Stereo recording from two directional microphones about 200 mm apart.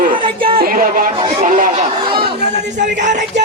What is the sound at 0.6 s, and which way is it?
Speech, 45° right (ahead or behind).